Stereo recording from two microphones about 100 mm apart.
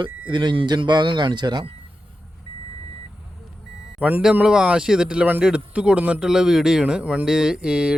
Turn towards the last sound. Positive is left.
turn(degrees=-10)  # may be behind; listen again after turning